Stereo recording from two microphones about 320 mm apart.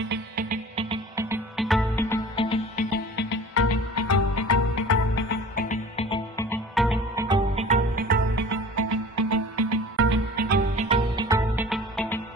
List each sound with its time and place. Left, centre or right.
0.1 s music: right; by 2.8 s centre
3.2 s music: left
5.3 s music: left; by 8.2 s right
8.4 s music: right
10.8 s music: centre